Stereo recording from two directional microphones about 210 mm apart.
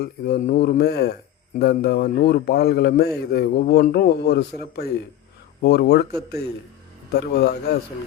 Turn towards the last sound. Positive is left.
turn(degrees=50)  # may be behind; listen again after turning